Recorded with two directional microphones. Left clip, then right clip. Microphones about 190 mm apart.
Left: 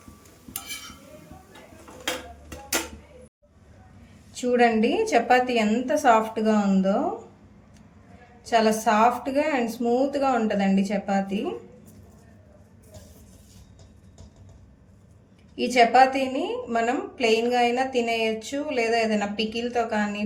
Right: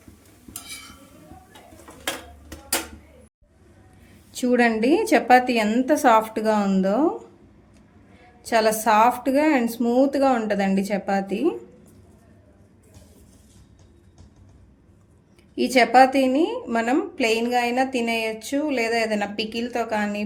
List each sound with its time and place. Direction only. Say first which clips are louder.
4.4 s a woman's voice: even; 50° right (ahead or behind)
8.4 s a woman's voice: right 2 dB; 50° right (ahead or behind)
15.5 s a woman's voice: right 2 dB; 50° right (ahead or behind)